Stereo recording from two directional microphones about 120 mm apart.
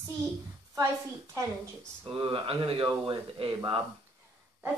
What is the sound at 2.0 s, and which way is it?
Speech, 40° right (ahead or behind).